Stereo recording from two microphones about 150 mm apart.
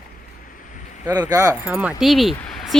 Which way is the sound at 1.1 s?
25° right (ahead or behind).